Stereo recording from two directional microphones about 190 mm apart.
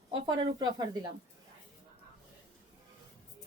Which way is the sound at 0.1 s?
25° right (ahead or behind).